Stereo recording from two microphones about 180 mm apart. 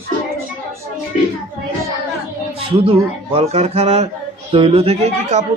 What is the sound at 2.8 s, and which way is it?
A man's voice, 35° right (ahead or behind).